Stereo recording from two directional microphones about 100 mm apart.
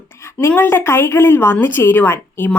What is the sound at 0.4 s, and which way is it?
A woman's voice, 25° left (ahead or behind).